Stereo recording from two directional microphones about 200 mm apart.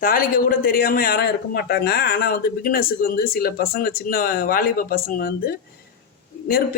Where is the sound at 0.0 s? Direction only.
45° left (ahead or behind).